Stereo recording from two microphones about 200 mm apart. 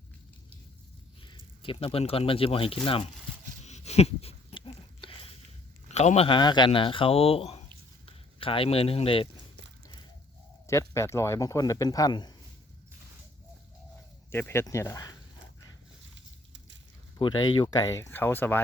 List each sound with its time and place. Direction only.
1.6 s speech: 25° left (ahead or behind)
3.6 s dog: 35° left (ahead or behind)
5.9 s speech: 35° left (ahead or behind)
10.7 s speech: 15° left (ahead or behind)
14.3 s speech: 10° left (ahead or behind)
16.1 s a sound: 65° right (ahead or behind)
17.2 s speech: 25° left (ahead or behind)